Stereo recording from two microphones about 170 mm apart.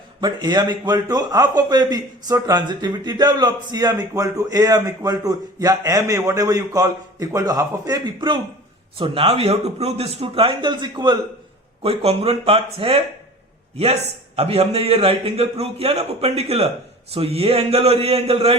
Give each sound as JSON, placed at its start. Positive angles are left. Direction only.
{"t": 0.2, "sound": "a man's voice", "side_deg": -25}
{"t": 14.3, "sound": "a man's voice", "side_deg": -35}